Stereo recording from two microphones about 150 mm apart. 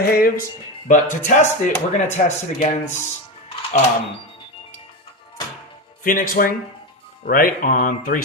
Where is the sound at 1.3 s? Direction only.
55° left (ahead or behind).